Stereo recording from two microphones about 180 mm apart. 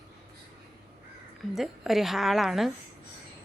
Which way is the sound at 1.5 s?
Centre (ahead or behind).